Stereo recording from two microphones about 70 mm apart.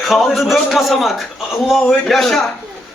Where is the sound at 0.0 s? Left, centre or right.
Centre.